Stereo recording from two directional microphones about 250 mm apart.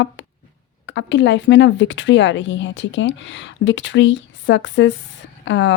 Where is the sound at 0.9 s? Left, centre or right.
Left.